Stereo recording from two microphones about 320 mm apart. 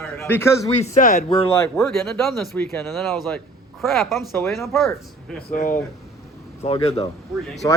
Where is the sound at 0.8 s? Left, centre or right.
Left; by 5.4 s centre.